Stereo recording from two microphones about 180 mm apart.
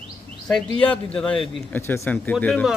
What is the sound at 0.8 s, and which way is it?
Speech, 30° left (ahead or behind).